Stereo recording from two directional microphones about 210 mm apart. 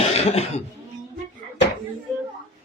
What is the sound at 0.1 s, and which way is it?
Speech, 30° left (ahead or behind).